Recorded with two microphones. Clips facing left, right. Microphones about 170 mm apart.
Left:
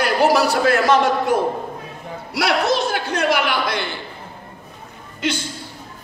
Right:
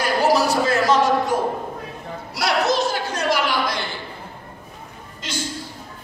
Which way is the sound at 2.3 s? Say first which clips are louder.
Left 1 dB; 60° left (ahead or behind).